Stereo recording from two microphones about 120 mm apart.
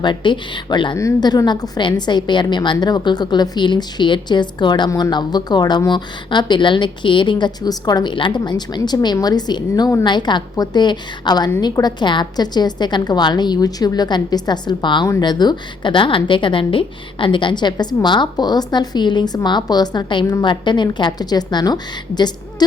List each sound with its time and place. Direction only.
0.0 s a woman's voice: 40° left (ahead or behind)
0.9 s a woman's voice: 30° left (ahead or behind)
4.9 s speech: 25° left (ahead or behind)
5.1 s a woman's voice: 35° left (ahead or behind)